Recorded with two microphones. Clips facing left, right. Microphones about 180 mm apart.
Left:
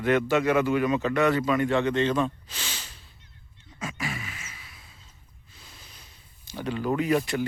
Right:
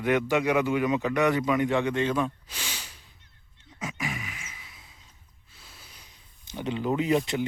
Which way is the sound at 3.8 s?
15° right (ahead or behind).